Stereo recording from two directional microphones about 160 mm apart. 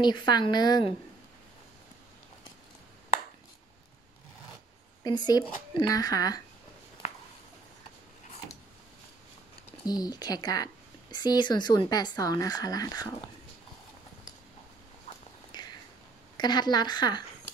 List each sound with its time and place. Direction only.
0.0 s speech: 25° left (ahead or behind)
5.0 s speech: 25° left (ahead or behind)
9.8 s speech: 25° left (ahead or behind)
15.5 s a sound: 25° left (ahead or behind)
16.3 s speech: 25° left (ahead or behind)